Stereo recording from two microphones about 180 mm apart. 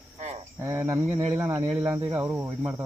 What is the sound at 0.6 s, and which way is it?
Speech, 15° right (ahead or behind).